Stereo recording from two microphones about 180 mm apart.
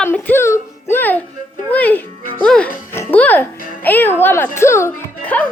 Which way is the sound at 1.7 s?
10° left (ahead or behind).